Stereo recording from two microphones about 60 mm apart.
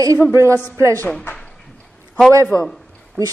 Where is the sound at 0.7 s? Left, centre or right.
Right.